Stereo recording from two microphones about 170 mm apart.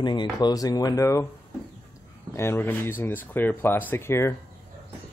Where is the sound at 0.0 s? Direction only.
25° left (ahead or behind).